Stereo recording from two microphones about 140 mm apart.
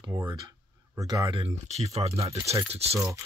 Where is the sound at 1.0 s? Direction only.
25° right (ahead or behind).